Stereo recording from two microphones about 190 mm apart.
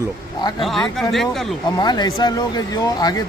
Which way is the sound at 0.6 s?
Centre (ahead or behind).